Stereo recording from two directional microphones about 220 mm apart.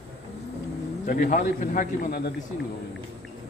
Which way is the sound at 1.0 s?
35° left (ahead or behind).